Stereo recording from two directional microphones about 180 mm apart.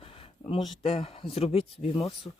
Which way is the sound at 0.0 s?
30° left (ahead or behind).